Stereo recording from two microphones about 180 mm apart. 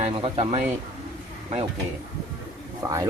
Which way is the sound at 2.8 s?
20° right (ahead or behind).